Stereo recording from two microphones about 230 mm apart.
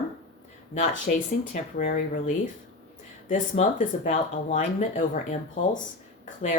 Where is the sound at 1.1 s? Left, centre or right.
Left.